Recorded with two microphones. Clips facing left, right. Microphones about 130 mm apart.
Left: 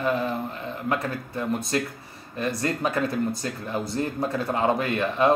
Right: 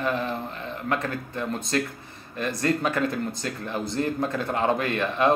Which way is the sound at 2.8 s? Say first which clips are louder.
Left 1 dB; 10° left (ahead or behind).